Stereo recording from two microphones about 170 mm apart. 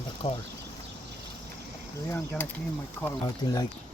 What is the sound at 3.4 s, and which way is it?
Speech, 25° left (ahead or behind).